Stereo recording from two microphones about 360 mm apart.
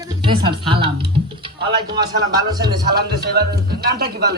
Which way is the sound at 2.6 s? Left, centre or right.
Right.